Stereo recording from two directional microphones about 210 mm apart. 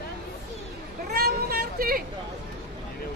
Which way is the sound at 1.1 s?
50° right (ahead or behind).